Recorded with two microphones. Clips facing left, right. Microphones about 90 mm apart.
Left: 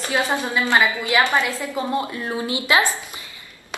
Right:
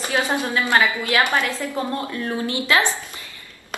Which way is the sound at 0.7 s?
15° left (ahead or behind).